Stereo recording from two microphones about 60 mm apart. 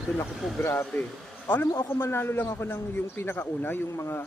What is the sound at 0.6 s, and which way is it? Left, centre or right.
A man's voice, left.